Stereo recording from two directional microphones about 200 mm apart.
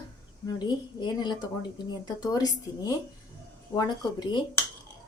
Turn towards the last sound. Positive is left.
turn(degrees=20)  # may be behind; listen again after turning